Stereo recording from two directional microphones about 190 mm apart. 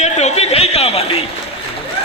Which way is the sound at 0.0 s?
35° left (ahead or behind).